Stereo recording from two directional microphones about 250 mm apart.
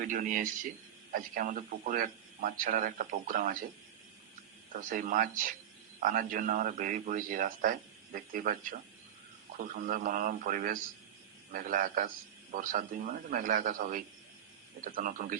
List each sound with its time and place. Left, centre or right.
0.0 s a man's voice: right
4.7 s a man's voice: right